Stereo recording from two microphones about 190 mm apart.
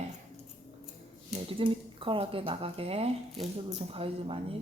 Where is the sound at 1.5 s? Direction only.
25° right (ahead or behind).